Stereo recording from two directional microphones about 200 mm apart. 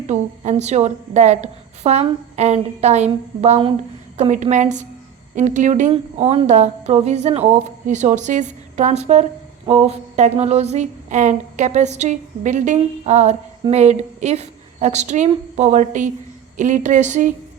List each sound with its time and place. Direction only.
0.1 s speech: 35° right (ahead or behind)